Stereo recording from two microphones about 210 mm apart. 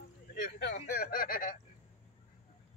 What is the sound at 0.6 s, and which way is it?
Speech, 50° left (ahead or behind).